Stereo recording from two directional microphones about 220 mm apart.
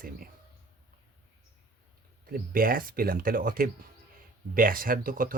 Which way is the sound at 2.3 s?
40° right (ahead or behind).